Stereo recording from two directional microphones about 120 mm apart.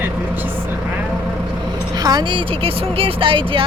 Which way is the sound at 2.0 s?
35° right (ahead or behind).